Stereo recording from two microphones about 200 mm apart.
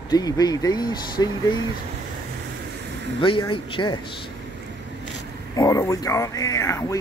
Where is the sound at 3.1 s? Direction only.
25° left (ahead or behind).